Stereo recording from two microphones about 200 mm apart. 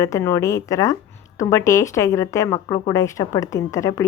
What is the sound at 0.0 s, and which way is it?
Speech, 15° left (ahead or behind).